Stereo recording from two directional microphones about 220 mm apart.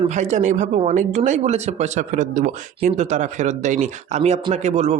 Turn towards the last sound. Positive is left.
turn(degrees=-30)  # may be behind; listen again after turning